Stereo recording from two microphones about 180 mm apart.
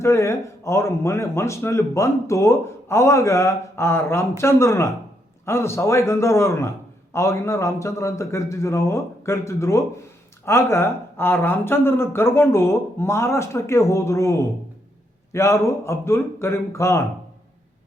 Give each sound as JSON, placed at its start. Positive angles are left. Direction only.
{"t": 0.0, "sound": "speech", "side_deg": 15}